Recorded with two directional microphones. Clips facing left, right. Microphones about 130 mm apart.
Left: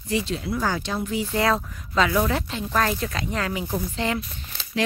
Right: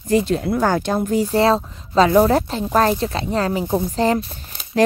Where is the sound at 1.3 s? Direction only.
30° right (ahead or behind).